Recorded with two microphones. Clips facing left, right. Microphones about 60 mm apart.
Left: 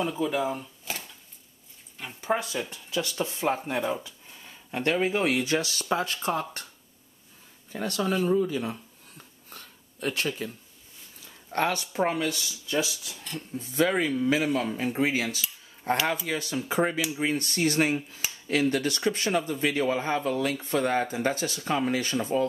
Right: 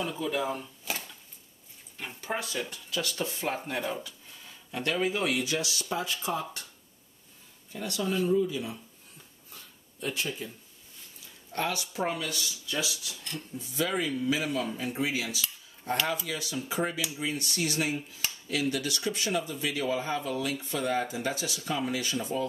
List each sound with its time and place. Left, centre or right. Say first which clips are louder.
0.1 s speech: left 3 dB; centre
2.2 s speech: left 5 dB; centre
4.6 s a man's voice: left 3 dB; left
7.7 s a man's voice: left 3 dB; left
9.5 s a sound: left 4 dB; left
11.5 s speech: left 5 dB; left
13.6 s a man's voice: left 6 dB; left